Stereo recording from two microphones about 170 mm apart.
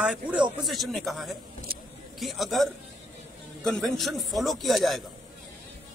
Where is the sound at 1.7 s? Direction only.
60° right (ahead or behind).